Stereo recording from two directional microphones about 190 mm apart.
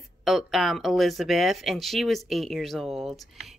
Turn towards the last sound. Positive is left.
turn(degrees=0)  # may be behind; listen again after turning